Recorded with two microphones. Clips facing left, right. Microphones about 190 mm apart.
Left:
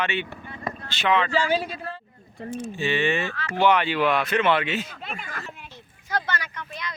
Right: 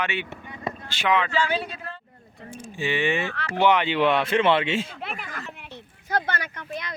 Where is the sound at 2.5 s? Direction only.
15° right (ahead or behind).